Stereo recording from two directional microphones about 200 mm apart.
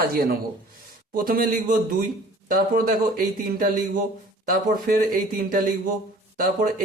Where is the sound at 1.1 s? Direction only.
45° right (ahead or behind).